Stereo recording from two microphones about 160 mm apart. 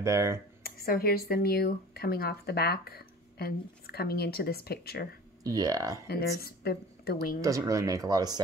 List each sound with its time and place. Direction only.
0.0 s speech: 20° right (ahead or behind)
0.7 s speech: 70° left (ahead or behind)
5.4 s speech: 20° right (ahead or behind)
6.0 s speech: 70° left (ahead or behind)
7.4 s speech: 20° right (ahead or behind)